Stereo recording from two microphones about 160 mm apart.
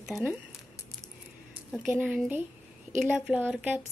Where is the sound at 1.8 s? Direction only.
5° right (ahead or behind).